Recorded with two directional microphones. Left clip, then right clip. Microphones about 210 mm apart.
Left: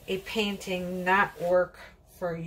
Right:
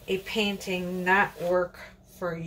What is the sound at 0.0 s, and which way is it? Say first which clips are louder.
Speech: right 2 dB; 5° right (ahead or behind).